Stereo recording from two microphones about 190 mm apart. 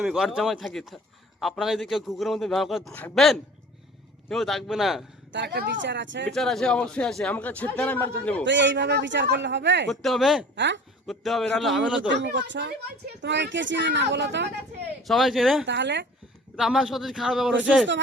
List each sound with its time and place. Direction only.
0.0 s a man's voice: centre (ahead or behind)
5.3 s speech: 65° right (ahead or behind)
6.3 s speech: centre (ahead or behind)
8.4 s speech: 70° right (ahead or behind)
9.9 s a man's voice: centre (ahead or behind)
10.5 s speech: 70° right (ahead or behind)
11.0 s a man's voice: centre (ahead or behind)
12.1 s speech: 65° right (ahead or behind)
15.0 s a man's voice: centre (ahead or behind)
15.6 s speech: 70° right (ahead or behind)
16.6 s a man's voice: centre (ahead or behind)